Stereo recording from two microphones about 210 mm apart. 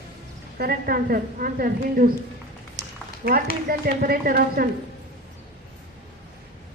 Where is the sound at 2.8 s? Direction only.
15° right (ahead or behind).